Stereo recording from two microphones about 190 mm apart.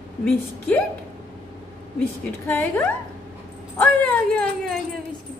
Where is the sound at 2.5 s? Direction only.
10° left (ahead or behind).